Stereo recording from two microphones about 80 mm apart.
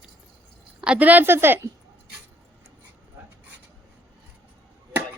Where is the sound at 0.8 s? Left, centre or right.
Centre.